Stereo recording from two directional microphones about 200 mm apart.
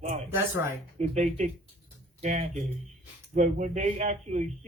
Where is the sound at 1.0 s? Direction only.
35° right (ahead or behind).